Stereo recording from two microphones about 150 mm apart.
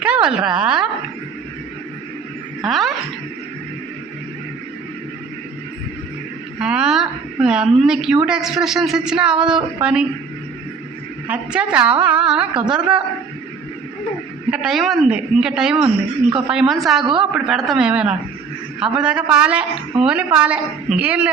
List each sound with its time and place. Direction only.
0.0 s a woman's voice: 5° right (ahead or behind)
2.6 s a woman's voice: centre (ahead or behind)
6.6 s a woman's voice: 5° right (ahead or behind)
11.3 s a woman's voice: 5° right (ahead or behind)
14.5 s a woman's voice: 5° right (ahead or behind)
17.0 s a woman's voice: 35° right (ahead or behind)
17.3 s a woman's voice: centre (ahead or behind)